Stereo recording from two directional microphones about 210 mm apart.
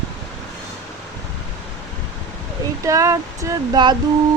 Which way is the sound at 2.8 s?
15° right (ahead or behind).